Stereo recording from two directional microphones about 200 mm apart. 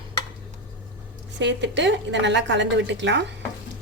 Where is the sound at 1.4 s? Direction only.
60° right (ahead or behind).